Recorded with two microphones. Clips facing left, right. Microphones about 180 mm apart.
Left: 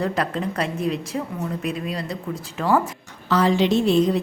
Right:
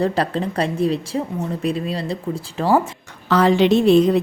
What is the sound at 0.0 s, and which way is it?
A woman's voice, 30° right (ahead or behind).